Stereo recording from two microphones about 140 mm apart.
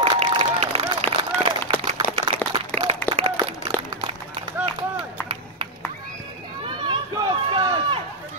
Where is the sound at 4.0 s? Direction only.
45° right (ahead or behind).